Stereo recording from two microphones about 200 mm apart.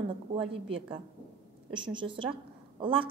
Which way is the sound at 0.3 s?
25° right (ahead or behind).